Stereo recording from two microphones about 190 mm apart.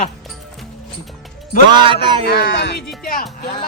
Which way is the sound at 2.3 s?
60° left (ahead or behind).